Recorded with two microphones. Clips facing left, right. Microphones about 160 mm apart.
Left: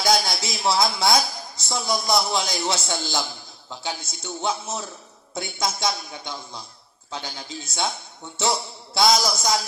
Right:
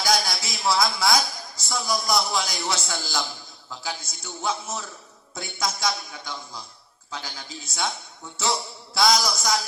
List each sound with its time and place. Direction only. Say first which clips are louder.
0.0 s a sound: left 3 dB; 25° left (ahead or behind)
1.5 s a man's voice: left 1 dB; 25° left (ahead or behind)
9.0 s a man's voice: left 2 dB; 25° left (ahead or behind)